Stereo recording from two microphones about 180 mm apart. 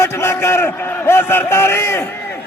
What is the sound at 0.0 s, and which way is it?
A man's voice, 15° left (ahead or behind).